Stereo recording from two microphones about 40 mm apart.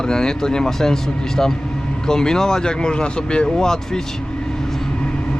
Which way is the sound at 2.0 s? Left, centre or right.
Centre.